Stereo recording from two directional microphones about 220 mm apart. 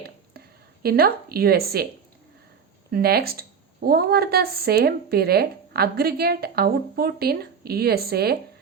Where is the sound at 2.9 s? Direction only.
45° right (ahead or behind).